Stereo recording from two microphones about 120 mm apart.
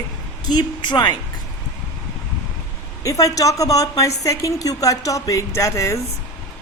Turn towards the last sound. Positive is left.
turn(degrees=25)  # may be behind; listen again after turning